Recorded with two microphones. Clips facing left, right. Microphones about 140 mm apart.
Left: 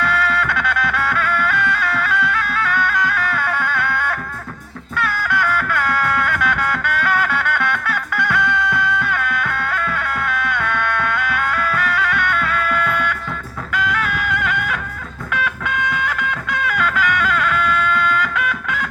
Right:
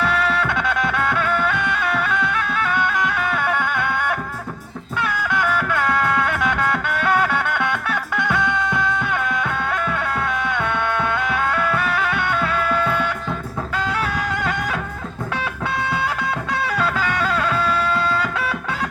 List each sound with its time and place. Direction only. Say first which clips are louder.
0.0 s music: even; 25° right (ahead or behind)